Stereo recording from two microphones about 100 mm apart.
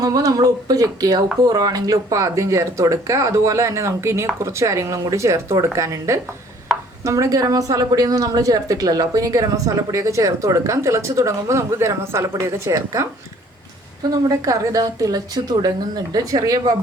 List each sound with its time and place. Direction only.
0.0 s speech: 35° right (ahead or behind)
14.1 s speech: 35° right (ahead or behind)